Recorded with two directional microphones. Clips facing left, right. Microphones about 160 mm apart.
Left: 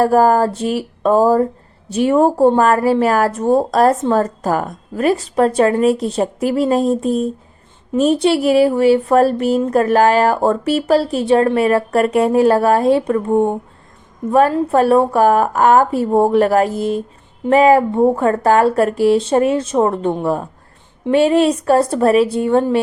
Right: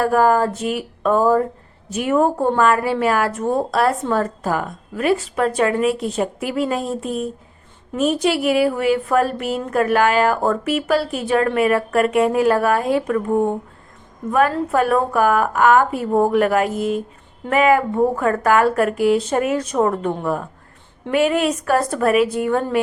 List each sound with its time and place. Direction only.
0.0 s a woman's voice: 35° left (ahead or behind)